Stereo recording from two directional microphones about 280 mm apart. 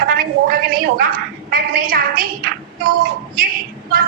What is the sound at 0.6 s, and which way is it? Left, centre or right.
A woman's voice, right.